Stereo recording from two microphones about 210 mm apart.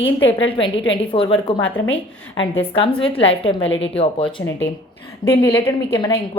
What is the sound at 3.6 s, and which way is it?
Speech, 60° left (ahead or behind).